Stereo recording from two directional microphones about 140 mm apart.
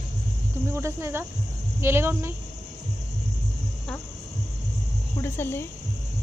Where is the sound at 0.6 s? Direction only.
20° right (ahead or behind).